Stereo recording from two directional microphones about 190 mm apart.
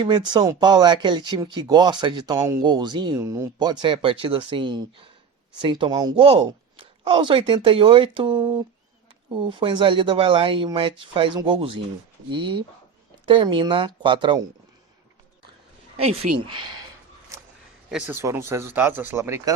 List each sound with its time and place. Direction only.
0.0 s speech: 25° right (ahead or behind)
16.0 s speech: 30° right (ahead or behind)
17.9 s speech: 10° right (ahead or behind)